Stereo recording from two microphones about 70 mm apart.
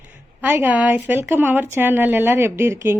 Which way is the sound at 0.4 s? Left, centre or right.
Right.